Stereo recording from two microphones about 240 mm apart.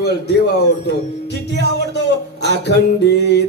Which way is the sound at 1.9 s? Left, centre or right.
Left.